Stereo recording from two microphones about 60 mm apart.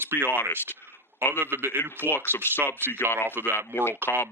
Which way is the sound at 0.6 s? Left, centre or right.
Right.